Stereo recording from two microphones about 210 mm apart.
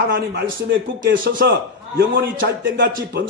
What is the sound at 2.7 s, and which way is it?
Speech, 45° right (ahead or behind).